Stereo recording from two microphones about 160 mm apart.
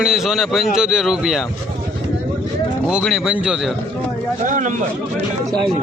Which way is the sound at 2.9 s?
5° right (ahead or behind).